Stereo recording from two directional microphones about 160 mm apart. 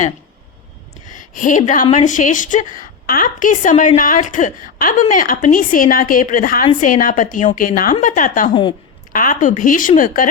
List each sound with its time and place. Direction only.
1.0 s a woman's voice: 55° left (ahead or behind)